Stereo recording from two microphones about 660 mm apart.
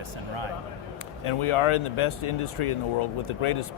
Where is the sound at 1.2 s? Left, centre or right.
Left.